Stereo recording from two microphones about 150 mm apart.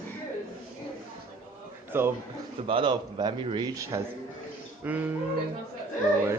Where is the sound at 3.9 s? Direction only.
20° right (ahead or behind).